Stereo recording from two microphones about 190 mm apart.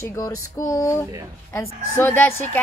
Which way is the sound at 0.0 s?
15° left (ahead or behind).